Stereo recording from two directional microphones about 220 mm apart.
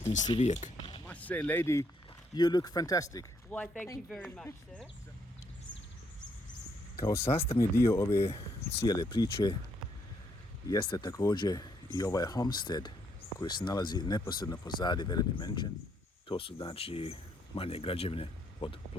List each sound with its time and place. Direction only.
0.0 s speech: 35° left (ahead or behind)
1.0 s speech: 5° left (ahead or behind)
6.9 s speech: 15° left (ahead or behind)
10.7 s speech: 15° left (ahead or behind)